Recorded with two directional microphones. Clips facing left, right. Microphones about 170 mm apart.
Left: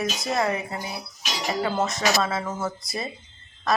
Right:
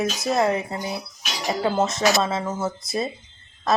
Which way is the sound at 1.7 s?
20° right (ahead or behind).